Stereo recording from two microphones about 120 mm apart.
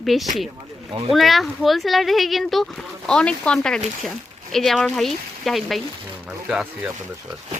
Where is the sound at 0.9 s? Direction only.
50° right (ahead or behind).